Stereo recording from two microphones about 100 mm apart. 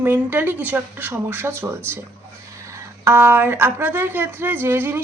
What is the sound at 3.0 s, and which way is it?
Speech, 20° right (ahead or behind).